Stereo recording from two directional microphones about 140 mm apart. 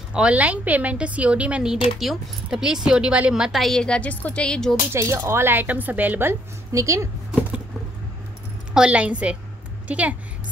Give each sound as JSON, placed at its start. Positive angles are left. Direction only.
{"t": 0.1, "sound": "speech", "side_deg": -10}
{"t": 4.9, "sound": "speech", "side_deg": -20}
{"t": 8.7, "sound": "a woman's voice", "side_deg": -10}